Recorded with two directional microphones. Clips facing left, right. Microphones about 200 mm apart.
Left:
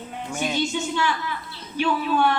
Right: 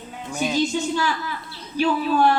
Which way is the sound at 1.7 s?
35° right (ahead or behind).